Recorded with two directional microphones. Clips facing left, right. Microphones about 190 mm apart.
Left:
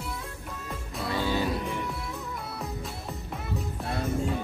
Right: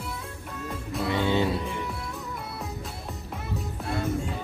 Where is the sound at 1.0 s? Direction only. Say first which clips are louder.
Right 3 dB; 20° right (ahead or behind).